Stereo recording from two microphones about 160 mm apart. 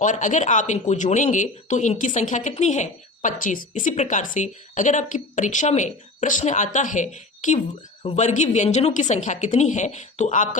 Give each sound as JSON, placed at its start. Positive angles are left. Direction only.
{"t": 0.0, "sound": "speech", "side_deg": 50}